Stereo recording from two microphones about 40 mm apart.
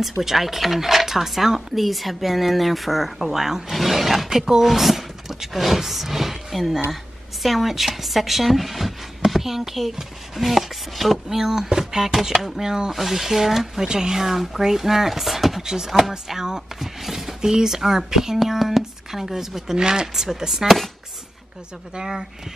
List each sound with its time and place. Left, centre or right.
0.2 s speech: centre
12.2 s speech: centre
12.9 s speech: centre
21.9 s speech: centre